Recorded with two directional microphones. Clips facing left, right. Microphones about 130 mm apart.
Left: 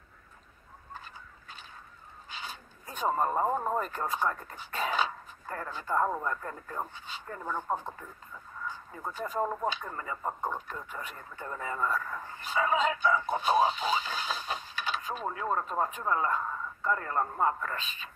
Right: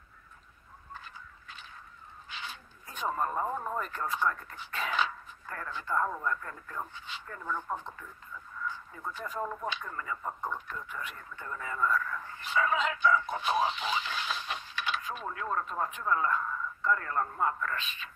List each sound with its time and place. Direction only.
2.4 s speech: 40° left (ahead or behind)
9.1 s speech: 40° left (ahead or behind)